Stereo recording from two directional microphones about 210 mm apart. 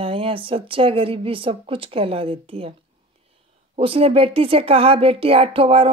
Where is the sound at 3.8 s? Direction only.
25° right (ahead or behind).